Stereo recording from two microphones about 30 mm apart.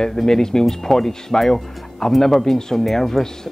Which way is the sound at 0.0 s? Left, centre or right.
Centre.